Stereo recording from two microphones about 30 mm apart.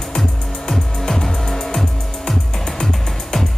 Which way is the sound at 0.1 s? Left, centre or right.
Centre.